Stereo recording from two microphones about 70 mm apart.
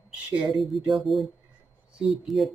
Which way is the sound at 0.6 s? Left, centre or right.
Centre.